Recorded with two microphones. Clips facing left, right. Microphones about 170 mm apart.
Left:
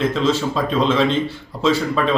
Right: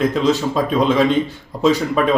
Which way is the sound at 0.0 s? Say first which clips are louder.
Right 2 dB; 15° right (ahead or behind).